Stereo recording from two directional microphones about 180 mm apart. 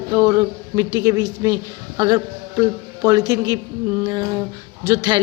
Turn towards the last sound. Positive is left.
turn(degrees=-20)  # may be behind; listen again after turning